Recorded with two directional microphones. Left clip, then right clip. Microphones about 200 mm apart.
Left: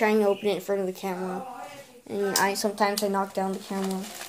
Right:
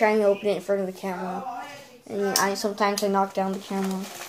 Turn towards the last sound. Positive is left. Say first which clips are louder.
# right 2 dB
turn(degrees=45)  # may be behind; listen again after turning